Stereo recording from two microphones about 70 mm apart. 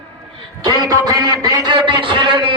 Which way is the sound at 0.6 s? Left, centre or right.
Right.